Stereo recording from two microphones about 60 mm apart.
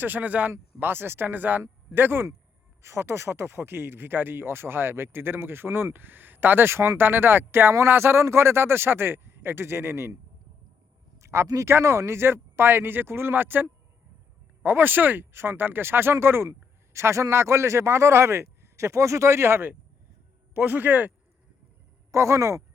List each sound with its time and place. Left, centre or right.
0.0 s speech: right
11.2 s a sound: right
11.4 s a man's voice: right
20.5 s speech: right
22.1 s a man's voice: right